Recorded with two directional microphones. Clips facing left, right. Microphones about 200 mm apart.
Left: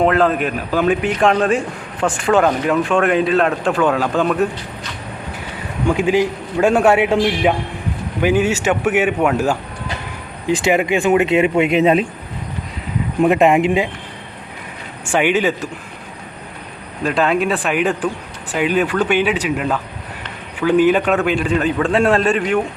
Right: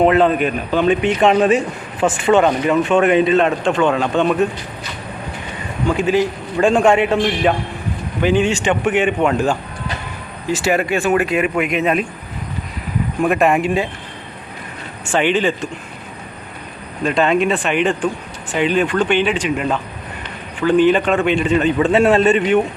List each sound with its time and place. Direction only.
0.0 s a man's voice: 5° right (ahead or behind)
5.9 s a man's voice: 15° left (ahead or behind)
13.2 s speech: 20° left (ahead or behind)
15.0 s a man's voice: 10° left (ahead or behind)
17.0 s a man's voice: centre (ahead or behind)